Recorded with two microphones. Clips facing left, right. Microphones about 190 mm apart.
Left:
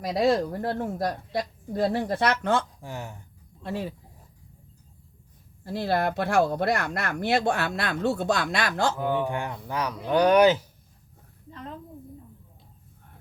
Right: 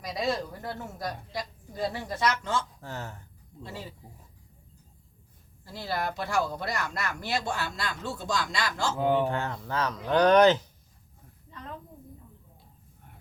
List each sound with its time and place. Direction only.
0.0 s speech: 60° left (ahead or behind)
2.8 s speech: 15° left (ahead or behind)
3.6 s speech: 60° left (ahead or behind)
5.6 s speech: 60° left (ahead or behind)
9.0 s speech: 15° right (ahead or behind)
9.2 s speech: 15° left (ahead or behind)